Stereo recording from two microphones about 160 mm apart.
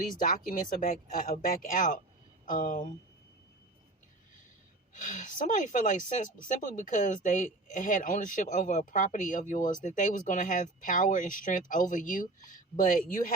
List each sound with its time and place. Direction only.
0.2 s speech: 60° left (ahead or behind)
4.9 s speech: 55° left (ahead or behind)